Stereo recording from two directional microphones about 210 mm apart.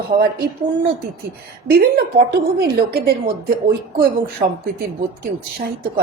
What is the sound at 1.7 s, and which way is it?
Speech, 50° right (ahead or behind).